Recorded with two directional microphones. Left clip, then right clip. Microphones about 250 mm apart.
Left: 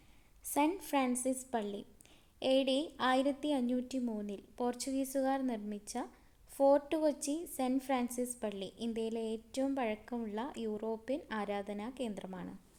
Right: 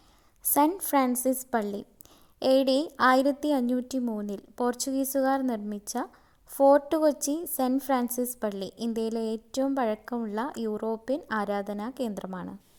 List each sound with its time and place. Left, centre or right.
0.4 s speech: right